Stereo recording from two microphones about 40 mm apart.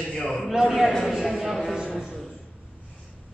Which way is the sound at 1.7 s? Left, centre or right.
Centre.